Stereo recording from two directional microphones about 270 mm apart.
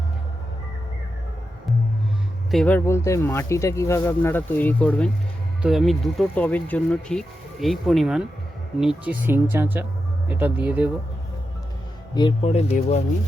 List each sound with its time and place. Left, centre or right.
2.5 s speech: centre
12.1 s speech: centre